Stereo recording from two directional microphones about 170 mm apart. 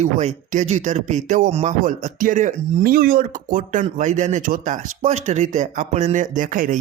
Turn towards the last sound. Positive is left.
turn(degrees=-50)  # may be behind; listen again after turning